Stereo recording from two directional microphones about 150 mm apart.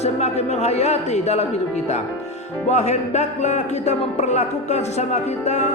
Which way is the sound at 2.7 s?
50° left (ahead or behind).